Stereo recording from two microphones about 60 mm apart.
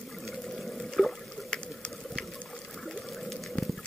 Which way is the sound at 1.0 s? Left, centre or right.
Centre.